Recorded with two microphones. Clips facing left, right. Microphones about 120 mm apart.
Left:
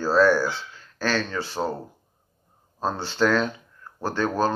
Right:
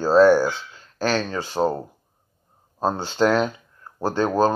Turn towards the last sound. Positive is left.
turn(degrees=-15)  # may be behind; listen again after turning